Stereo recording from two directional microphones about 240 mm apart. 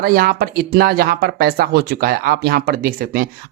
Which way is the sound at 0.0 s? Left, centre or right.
Right.